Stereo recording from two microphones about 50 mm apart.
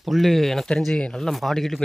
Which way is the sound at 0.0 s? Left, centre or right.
Centre.